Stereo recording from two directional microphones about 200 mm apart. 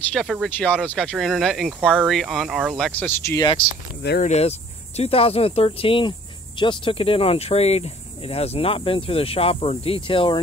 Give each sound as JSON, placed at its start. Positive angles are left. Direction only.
{"t": 0.1, "sound": "speech", "side_deg": 0}
{"t": 4.2, "sound": "speech", "side_deg": 35}